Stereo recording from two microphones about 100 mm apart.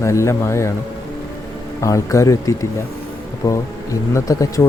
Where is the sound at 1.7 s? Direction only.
30° left (ahead or behind).